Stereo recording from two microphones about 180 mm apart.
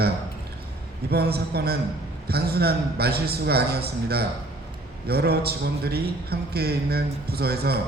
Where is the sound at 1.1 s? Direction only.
60° right (ahead or behind).